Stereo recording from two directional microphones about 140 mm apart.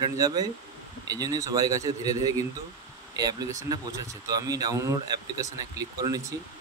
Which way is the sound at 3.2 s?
30° right (ahead or behind).